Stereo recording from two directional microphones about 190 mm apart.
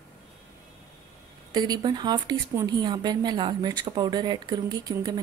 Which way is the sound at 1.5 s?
20° right (ahead or behind).